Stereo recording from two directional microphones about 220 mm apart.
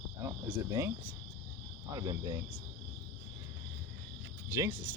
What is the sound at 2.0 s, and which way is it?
Speech, 15° right (ahead or behind).